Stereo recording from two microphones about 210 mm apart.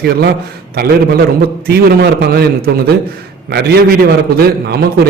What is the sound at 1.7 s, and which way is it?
Speech, 50° right (ahead or behind).